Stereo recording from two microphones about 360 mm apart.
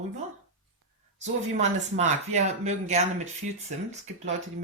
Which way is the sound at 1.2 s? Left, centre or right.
Centre.